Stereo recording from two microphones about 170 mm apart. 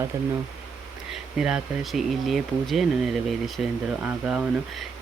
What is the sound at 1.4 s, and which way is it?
Speech, 5° right (ahead or behind).